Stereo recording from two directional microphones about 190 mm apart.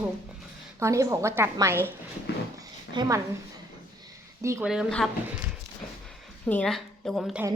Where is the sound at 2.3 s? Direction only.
65° left (ahead or behind).